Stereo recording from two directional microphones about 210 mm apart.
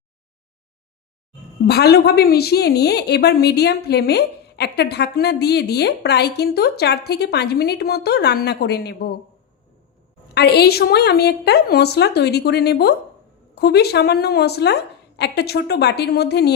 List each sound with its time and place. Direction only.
1.6 s a woman's voice: 50° left (ahead or behind)
10.3 s a woman's voice: 50° left (ahead or behind)